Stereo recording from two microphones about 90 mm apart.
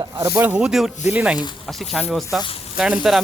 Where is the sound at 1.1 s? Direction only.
15° right (ahead or behind).